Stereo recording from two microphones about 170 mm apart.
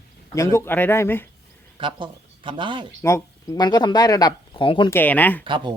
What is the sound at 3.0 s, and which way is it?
Speech, 20° left (ahead or behind).